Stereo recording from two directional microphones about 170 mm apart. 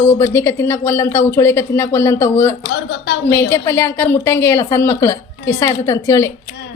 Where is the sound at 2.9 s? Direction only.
85° left.